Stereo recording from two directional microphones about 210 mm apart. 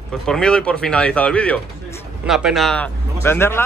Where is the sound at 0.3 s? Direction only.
5° left (ahead or behind).